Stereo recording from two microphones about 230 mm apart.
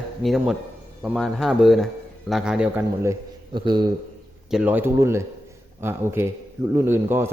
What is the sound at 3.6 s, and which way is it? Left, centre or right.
Speech, right.